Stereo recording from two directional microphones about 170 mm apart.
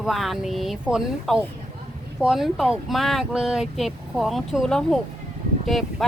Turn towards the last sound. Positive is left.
turn(degrees=0)  # may be behind; listen again after turning